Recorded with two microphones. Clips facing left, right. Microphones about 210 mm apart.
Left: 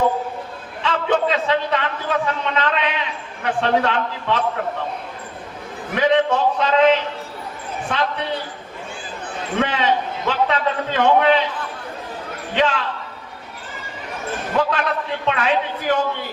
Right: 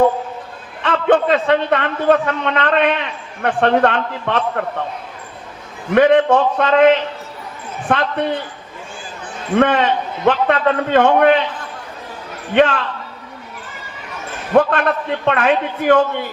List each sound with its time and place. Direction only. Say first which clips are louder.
0.8 s a man's voice: right 5 dB; 55° right (ahead or behind)
5.9 s a man's voice: right 6 dB; 55° right (ahead or behind)
7.9 s a man's voice: right 5 dB; 55° right (ahead or behind)
9.6 s a man's voice: right 6 dB; 55° right (ahead or behind)
12.5 s a man's voice: right 6 dB; 55° right (ahead or behind)
14.5 s a man's voice: right 7 dB; 55° right (ahead or behind)